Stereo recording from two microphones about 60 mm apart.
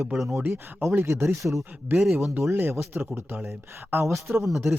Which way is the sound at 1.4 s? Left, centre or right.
Right.